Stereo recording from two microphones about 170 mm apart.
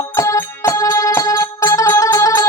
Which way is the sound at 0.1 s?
15° left (ahead or behind).